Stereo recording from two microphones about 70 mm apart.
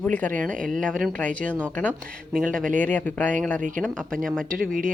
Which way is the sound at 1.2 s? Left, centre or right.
Left.